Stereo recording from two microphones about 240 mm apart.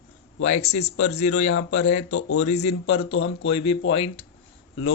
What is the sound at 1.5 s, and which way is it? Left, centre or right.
Speech, left.